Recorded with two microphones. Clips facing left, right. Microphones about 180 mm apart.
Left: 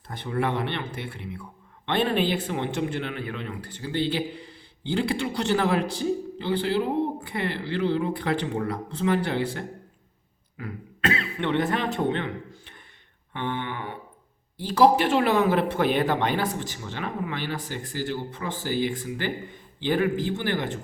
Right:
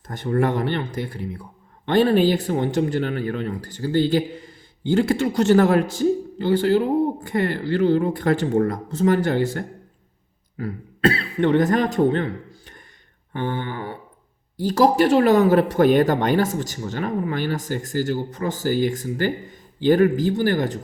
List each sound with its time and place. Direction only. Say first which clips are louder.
0.1 s speech: right 6 dB; 45° right (ahead or behind)